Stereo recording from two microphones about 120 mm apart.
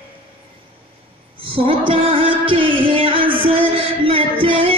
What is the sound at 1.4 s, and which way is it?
Music, 45° right (ahead or behind).